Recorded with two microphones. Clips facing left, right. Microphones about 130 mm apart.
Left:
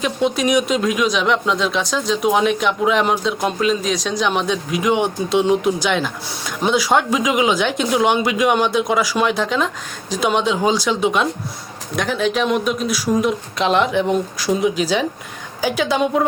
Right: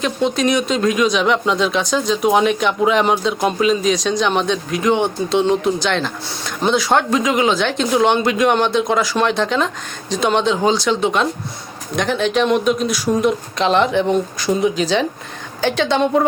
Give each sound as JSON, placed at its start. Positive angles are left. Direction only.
{"t": 0.0, "sound": "speech", "side_deg": 10}